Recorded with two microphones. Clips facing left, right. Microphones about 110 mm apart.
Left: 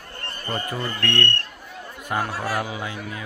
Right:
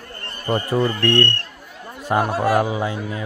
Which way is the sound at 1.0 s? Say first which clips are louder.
Right 6 dB; 30° right (ahead or behind).